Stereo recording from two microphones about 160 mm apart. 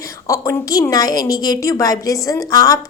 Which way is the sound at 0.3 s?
20° left (ahead or behind).